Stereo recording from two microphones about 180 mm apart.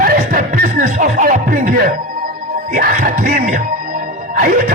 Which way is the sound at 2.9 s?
50° right (ahead or behind).